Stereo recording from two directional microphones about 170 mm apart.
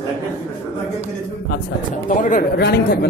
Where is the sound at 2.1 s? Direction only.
50° left (ahead or behind).